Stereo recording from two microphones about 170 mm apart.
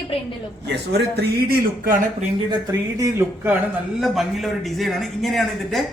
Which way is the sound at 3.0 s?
15° right (ahead or behind).